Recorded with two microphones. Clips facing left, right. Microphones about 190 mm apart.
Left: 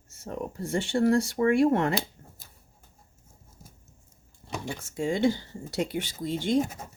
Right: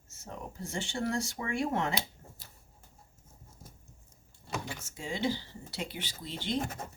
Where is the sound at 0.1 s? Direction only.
60° left (ahead or behind).